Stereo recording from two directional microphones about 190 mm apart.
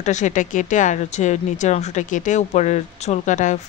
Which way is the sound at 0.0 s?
40° left (ahead or behind).